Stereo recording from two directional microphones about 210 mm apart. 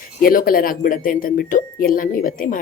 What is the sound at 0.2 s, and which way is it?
Speech, 45° left (ahead or behind).